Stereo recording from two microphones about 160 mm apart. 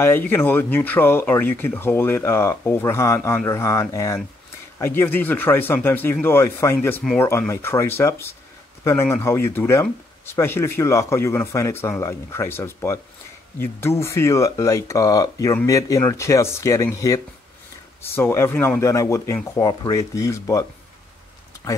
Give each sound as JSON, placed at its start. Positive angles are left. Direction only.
{"t": 0.0, "sound": "speech", "side_deg": 15}